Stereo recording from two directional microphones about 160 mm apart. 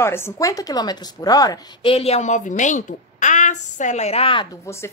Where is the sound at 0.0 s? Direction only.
15° left (ahead or behind); by 4.5 s 35° left (ahead or behind).